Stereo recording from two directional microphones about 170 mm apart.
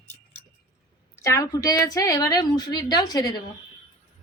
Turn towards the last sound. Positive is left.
turn(degrees=25)  # may be behind; listen again after turning